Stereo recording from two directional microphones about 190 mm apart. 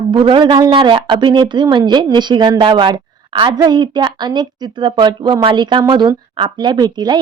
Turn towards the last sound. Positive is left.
turn(degrees=-20)  # may be behind; listen again after turning